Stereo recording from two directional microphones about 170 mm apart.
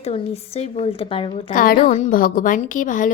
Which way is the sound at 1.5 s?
55° left (ahead or behind).